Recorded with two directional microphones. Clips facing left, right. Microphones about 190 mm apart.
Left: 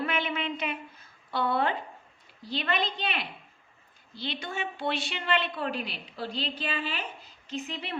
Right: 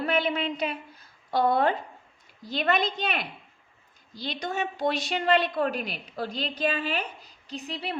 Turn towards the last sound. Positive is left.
turn(degrees=-35)  # may be behind; listen again after turning